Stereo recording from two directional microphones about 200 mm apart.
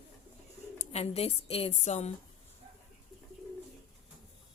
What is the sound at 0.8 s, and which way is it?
A woman's voice, 30° left (ahead or behind).